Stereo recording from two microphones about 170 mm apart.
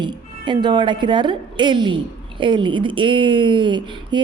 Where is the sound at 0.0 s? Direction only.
25° right (ahead or behind).